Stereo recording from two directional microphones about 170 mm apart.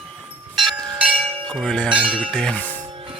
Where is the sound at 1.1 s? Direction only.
35° right (ahead or behind).